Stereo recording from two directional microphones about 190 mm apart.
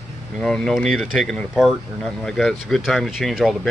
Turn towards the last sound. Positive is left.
turn(degrees=0)  # may be behind; listen again after turning